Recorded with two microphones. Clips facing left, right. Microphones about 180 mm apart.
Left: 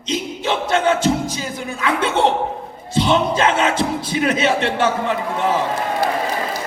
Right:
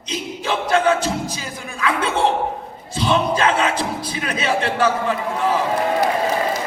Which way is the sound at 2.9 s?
25° left (ahead or behind).